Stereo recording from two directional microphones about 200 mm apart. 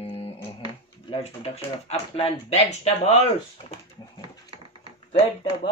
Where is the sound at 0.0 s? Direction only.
25° left (ahead or behind).